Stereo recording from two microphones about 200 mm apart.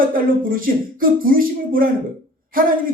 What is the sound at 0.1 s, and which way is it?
A man's voice, 45° right (ahead or behind).